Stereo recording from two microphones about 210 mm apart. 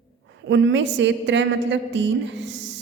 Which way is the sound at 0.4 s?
60° right (ahead or behind).